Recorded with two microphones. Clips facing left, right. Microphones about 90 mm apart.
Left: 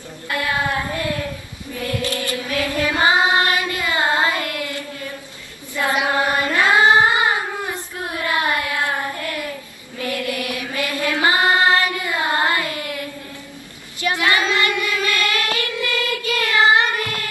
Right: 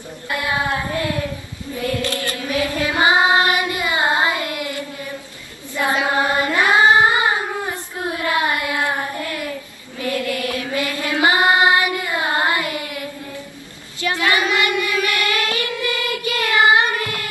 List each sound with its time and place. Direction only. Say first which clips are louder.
0.3 s child singing: even; 20° right (ahead or behind)
2.0 s chant: even; 20° left (ahead or behind)
2.5 s child singing: right 1 dB; 20° right (ahead or behind)
10.2 s mantra: right 2 dB; 20° left (ahead or behind)
10.7 s child singing: left 2 dB; 20° right (ahead or behind)
14.3 s child singing: right 1 dB; 20° right (ahead or behind)
15.0 s music: even; 20° right (ahead or behind)
15.5 s child singing: even; 20° right (ahead or behind)